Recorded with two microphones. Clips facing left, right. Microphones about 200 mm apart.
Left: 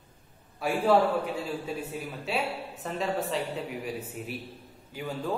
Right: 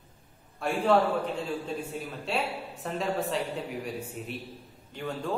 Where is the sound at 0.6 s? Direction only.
5° left (ahead or behind).